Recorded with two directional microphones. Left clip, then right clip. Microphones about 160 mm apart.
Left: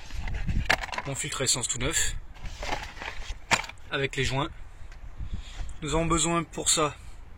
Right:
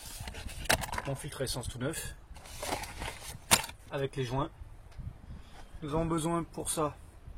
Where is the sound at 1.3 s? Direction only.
5° left (ahead or behind).